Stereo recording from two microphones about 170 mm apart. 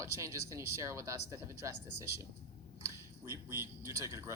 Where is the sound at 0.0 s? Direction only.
15° right (ahead or behind).